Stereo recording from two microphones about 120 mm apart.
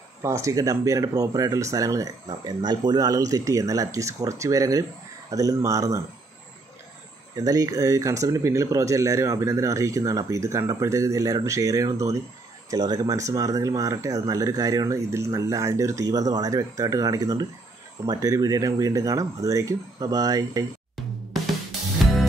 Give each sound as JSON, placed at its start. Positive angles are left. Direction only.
{"t": 0.2, "sound": "speech", "side_deg": -25}
{"t": 7.3, "sound": "speech", "side_deg": -30}